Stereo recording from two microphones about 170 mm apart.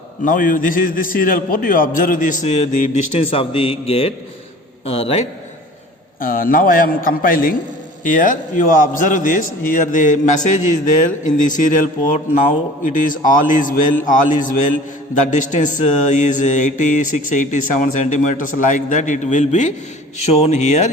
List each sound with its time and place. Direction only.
0.3 s a man's voice: 50° left (ahead or behind); by 5.2 s 35° left (ahead or behind)
6.1 s a man's voice: 55° left (ahead or behind)